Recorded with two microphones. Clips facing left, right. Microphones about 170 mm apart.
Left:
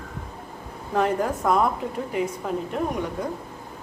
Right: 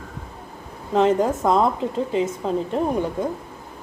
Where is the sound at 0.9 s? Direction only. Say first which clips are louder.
Right 5 dB; 20° right (ahead or behind).